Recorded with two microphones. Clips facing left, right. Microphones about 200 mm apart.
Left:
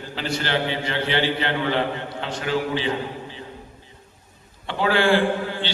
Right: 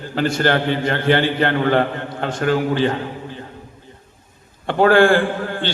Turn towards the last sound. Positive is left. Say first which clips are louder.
# right 2 dB
turn(degrees=-50)  # may be behind; listen again after turning